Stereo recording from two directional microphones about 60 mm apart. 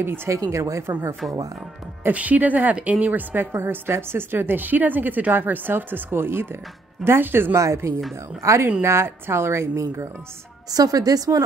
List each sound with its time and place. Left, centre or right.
0.0 s a woman's voice: right
0.3 s speech: right
2.0 s a woman's voice: right
7.5 s speech: right
8.8 s speech: right
10.7 s a woman's voice: right